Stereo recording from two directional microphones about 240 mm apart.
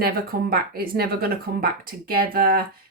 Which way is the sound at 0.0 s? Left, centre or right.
Right.